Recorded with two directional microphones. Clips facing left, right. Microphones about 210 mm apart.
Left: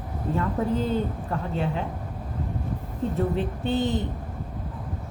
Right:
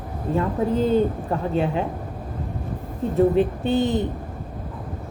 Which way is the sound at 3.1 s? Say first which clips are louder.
Right 11 dB; 15° right (ahead or behind).